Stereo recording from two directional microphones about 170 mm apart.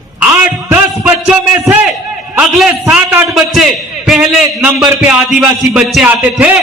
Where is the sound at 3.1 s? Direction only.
15° right (ahead or behind).